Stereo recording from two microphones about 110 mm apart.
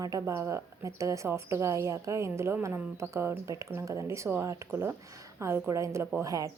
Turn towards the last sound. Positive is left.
turn(degrees=-30)  # may be behind; listen again after turning